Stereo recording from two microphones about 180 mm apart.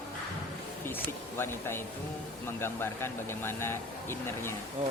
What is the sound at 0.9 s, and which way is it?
Speech, 10° left (ahead or behind).